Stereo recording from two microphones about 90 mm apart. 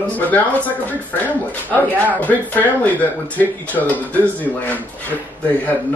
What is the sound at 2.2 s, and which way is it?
Speech, 20° left (ahead or behind).